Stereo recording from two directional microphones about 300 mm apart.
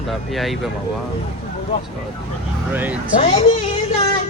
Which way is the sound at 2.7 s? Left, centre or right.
Centre.